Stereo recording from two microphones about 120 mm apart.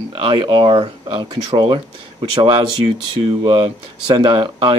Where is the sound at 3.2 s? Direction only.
45° right (ahead or behind).